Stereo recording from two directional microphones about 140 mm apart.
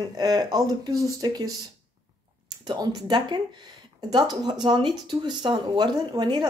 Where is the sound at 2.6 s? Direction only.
30° right (ahead or behind).